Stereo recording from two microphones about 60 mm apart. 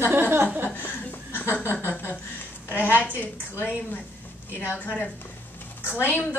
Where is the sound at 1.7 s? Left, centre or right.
Left.